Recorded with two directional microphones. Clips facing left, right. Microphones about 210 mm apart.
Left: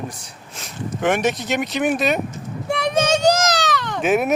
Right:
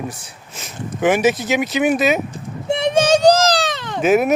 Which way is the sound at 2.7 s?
25° right (ahead or behind).